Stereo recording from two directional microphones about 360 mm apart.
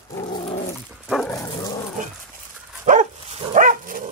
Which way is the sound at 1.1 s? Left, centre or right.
Centre.